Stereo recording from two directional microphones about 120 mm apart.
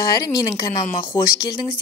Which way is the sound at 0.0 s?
35° left (ahead or behind).